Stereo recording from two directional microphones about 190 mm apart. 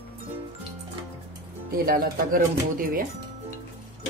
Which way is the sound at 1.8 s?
50° right (ahead or behind).